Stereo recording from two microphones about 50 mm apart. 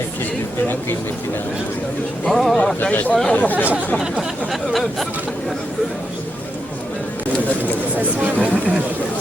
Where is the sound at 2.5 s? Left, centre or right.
Left.